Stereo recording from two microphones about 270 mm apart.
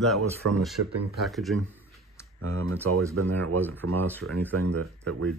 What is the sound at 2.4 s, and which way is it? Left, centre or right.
Speech, right.